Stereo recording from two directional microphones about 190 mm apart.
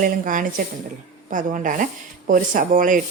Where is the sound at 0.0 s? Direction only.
45° right (ahead or behind).